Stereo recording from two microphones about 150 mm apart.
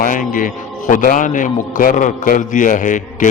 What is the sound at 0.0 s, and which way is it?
A man's voice, 65° left (ahead or behind).